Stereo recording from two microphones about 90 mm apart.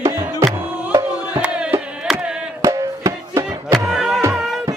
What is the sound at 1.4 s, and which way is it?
Music, 10° right (ahead or behind).